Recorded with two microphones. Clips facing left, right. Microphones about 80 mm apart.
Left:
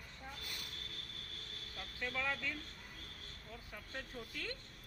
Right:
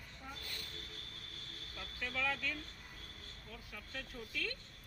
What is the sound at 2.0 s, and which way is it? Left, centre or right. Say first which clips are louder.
Speech: right 1 dB; left.